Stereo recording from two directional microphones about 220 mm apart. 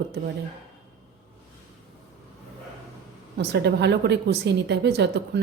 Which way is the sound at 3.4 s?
50° right (ahead or behind).